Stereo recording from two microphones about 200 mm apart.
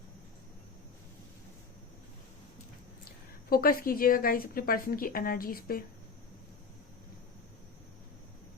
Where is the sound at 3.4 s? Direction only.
45° left (ahead or behind).